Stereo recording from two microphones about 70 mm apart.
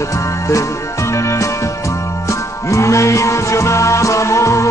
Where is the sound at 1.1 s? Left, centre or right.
Left.